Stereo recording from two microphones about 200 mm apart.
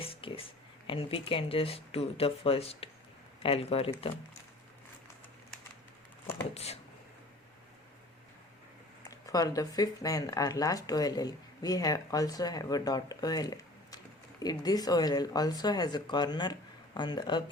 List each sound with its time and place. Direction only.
0.0 s a sound: 25° left (ahead or behind)
0.9 s speech: 25° left (ahead or behind)
6.5 s speech: 30° left (ahead or behind)
9.0 s speech: 15° left (ahead or behind)